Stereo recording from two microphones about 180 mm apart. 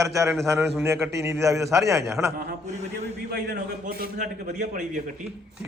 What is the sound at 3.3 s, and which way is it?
A man's voice, 55° right (ahead or behind).